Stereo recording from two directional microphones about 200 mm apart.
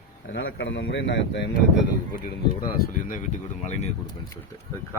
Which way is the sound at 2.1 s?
45° left (ahead or behind).